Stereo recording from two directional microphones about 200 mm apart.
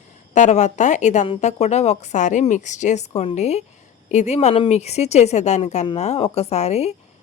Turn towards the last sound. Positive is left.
turn(degrees=30)  # may be behind; listen again after turning